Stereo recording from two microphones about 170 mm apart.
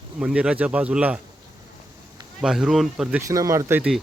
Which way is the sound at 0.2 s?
5° right (ahead or behind).